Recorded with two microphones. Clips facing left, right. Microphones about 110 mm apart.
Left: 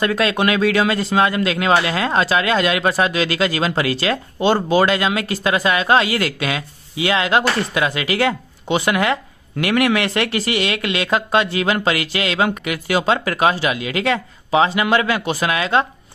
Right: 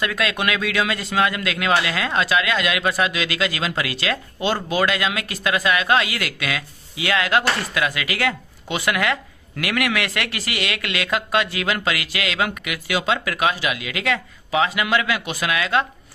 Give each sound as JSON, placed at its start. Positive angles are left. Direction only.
{"t": 0.0, "sound": "speech", "side_deg": 30}